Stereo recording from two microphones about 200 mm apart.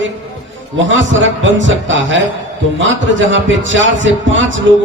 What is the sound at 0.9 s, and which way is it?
A man's voice, 70° right (ahead or behind).